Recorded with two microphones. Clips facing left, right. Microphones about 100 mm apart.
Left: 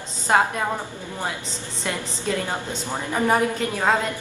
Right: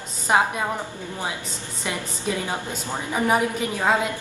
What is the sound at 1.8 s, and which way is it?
A woman's voice, 15° right (ahead or behind).